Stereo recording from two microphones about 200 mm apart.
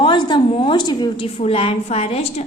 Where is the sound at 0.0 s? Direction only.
25° left (ahead or behind).